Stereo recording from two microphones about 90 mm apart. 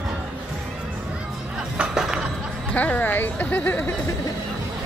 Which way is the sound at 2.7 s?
20° left (ahead or behind).